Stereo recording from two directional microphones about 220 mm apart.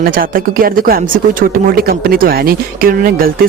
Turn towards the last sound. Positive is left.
turn(degrees=-40)  # may be behind; listen again after turning